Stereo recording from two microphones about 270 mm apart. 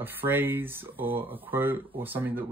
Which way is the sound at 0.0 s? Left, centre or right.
Centre.